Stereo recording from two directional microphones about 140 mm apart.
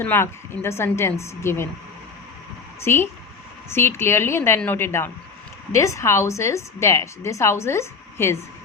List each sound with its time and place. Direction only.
0.0 s a woman's voice: 15° left (ahead or behind)
2.8 s a woman's voice: 15° left (ahead or behind)